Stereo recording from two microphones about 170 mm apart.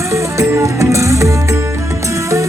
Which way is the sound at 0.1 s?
15° right (ahead or behind).